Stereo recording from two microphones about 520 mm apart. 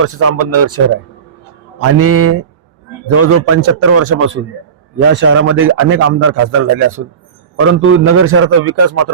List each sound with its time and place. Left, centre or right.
0.0 s speech: right
1.8 s speech: right